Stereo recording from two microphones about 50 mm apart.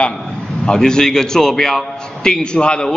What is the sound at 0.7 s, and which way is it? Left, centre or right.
A man's voice, centre.